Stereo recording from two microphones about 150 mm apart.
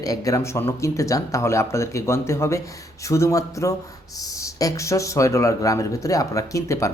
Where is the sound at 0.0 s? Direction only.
25° left (ahead or behind).